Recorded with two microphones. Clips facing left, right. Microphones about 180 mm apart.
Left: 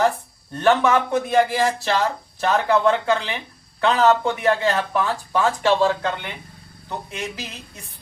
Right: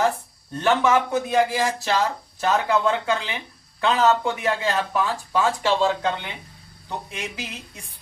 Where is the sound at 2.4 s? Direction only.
10° right (ahead or behind).